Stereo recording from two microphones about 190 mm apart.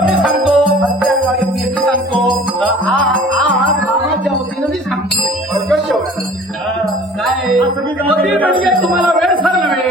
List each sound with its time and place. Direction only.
0.1 s music: centre (ahead or behind)
7.2 s music: centre (ahead or behind)
9.0 s a sound: 25° right (ahead or behind)